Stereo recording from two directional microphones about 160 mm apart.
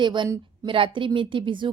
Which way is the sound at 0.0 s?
30° right (ahead or behind).